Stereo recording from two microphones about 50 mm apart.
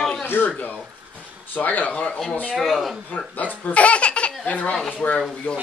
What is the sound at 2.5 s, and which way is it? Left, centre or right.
Speech, centre.